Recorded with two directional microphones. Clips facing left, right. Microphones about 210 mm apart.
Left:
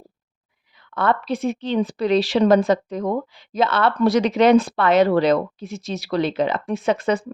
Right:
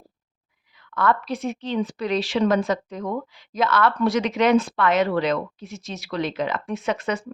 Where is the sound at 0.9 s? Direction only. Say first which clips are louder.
Left 2 dB; 30° left (ahead or behind).